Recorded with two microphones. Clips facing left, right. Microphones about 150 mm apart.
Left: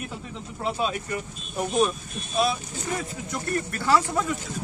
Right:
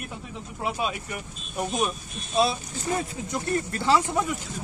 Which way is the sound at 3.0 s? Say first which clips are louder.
Right 2 dB; 25° right (ahead or behind).